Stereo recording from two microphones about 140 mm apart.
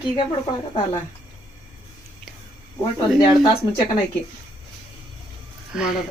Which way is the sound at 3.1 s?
30° left (ahead or behind).